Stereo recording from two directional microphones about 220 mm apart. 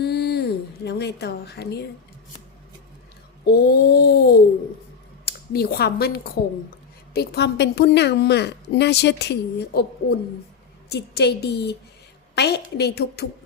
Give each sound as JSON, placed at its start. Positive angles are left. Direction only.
{"t": 0.0, "sound": "a sound", "side_deg": 45}
{"t": 0.9, "sound": "a woman's voice", "side_deg": 50}
{"t": 3.4, "sound": "a woman's voice", "side_deg": 45}